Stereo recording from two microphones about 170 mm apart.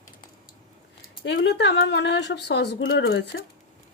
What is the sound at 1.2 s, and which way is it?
Speech, 90° left.